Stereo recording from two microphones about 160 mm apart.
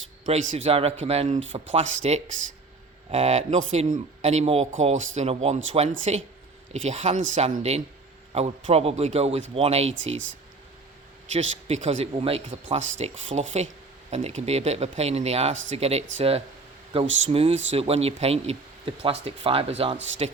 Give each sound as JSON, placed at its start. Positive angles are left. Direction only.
{"t": 0.3, "sound": "speech", "side_deg": -40}
{"t": 11.3, "sound": "speech", "side_deg": -45}
{"t": 12.5, "sound": "speech", "side_deg": -45}